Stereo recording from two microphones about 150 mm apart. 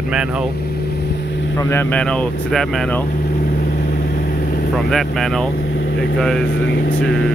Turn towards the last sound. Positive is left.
turn(degrees=5)  # may be behind; listen again after turning